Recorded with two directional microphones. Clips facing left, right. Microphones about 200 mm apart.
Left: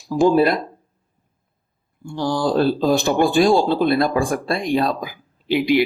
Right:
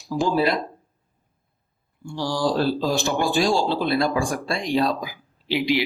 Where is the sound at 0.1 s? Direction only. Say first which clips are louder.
Left 6 dB; 50° left (ahead or behind).